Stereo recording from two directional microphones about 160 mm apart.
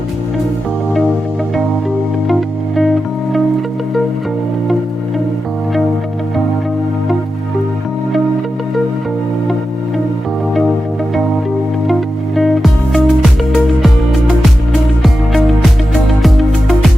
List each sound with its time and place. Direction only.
2.2 s music: centre (ahead or behind)
11.9 s music: centre (ahead or behind)